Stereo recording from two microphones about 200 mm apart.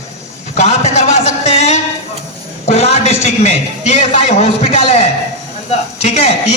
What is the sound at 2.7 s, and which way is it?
A man's voice, 30° left (ahead or behind).